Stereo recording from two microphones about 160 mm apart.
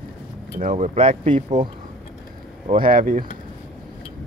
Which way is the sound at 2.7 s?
60° right (ahead or behind).